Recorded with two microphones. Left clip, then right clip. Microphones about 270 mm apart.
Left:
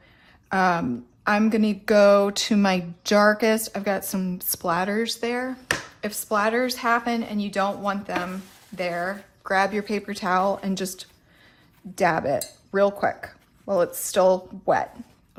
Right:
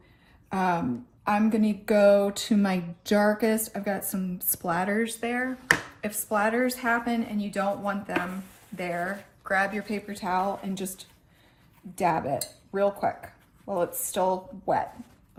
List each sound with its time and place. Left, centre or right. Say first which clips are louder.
0.4 s a woman's voice: left 5 dB; left
11.9 s a woman's voice: left 4 dB; left